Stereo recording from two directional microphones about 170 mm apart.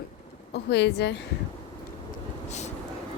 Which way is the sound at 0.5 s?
85° left.